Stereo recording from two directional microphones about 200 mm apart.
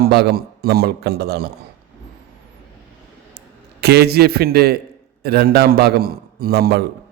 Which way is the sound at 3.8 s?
55° right (ahead or behind).